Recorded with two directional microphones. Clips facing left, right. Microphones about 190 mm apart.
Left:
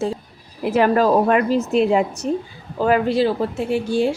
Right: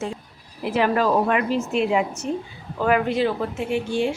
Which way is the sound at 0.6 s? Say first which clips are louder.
Left 4 dB; 45° left (ahead or behind).